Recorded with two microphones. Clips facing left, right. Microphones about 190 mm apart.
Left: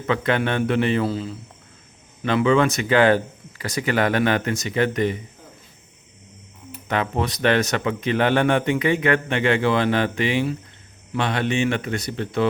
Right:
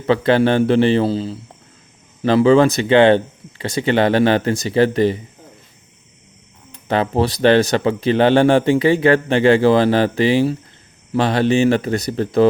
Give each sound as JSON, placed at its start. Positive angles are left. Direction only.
{"t": 0.0, "sound": "a man's voice", "side_deg": -35}
{"t": 6.8, "sound": "a man's voice", "side_deg": -30}